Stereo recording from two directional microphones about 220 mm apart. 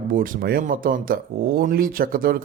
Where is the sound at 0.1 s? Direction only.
40° right (ahead or behind).